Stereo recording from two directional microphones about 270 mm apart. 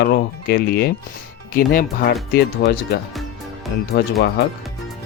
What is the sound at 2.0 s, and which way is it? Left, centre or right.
Speech, left.